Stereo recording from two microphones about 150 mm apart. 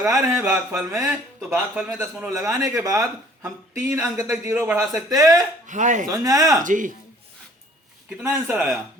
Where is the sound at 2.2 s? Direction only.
20° right (ahead or behind).